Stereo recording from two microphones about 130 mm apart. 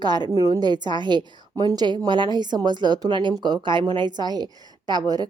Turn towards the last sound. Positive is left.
turn(degrees=-30)  # may be behind; listen again after turning